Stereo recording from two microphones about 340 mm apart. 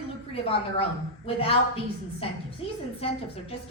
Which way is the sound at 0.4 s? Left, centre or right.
Centre.